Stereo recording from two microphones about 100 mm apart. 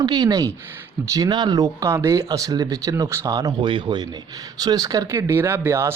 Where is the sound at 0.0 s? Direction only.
45° right (ahead or behind).